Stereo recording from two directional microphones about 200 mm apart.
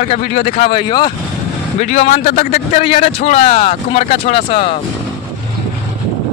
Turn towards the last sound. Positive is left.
turn(degrees=30)  # may be behind; listen again after turning